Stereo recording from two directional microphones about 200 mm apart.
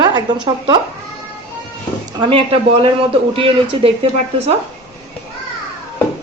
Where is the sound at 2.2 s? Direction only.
30° right (ahead or behind).